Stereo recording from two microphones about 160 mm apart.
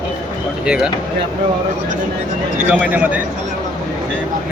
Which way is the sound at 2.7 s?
10° right (ahead or behind).